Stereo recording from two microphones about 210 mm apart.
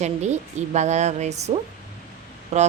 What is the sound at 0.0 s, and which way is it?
Speech, 35° right (ahead or behind).